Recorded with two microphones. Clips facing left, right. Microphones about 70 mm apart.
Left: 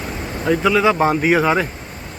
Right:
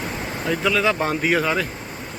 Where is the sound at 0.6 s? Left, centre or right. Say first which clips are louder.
Left 5 dB; centre.